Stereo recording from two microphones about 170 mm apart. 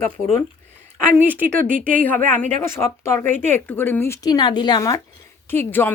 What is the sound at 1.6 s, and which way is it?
Speech, 55° right (ahead or behind).